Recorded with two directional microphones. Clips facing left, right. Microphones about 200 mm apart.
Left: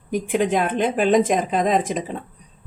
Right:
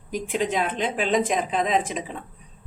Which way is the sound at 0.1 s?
55° left (ahead or behind).